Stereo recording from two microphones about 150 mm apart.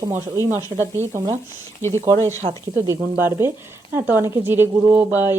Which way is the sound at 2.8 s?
15° right (ahead or behind).